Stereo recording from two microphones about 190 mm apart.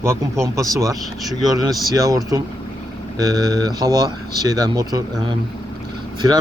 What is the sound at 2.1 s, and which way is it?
Speech, 20° right (ahead or behind).